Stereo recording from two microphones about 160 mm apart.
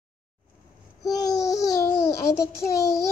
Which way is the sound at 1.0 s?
20° left (ahead or behind).